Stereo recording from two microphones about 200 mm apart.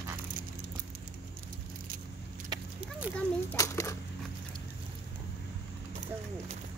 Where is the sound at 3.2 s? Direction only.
10° left (ahead or behind).